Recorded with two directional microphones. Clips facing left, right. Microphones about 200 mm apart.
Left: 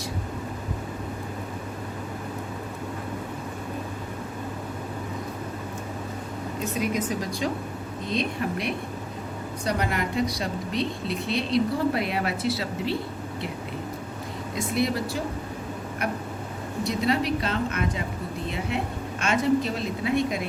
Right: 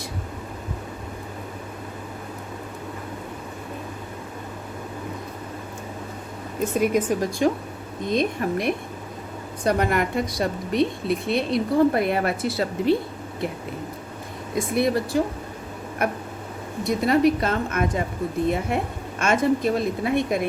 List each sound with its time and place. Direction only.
6.7 s a woman's voice: 50° right (ahead or behind)
15.1 s speech: 55° right (ahead or behind)
16.8 s a woman's voice: 50° right (ahead or behind)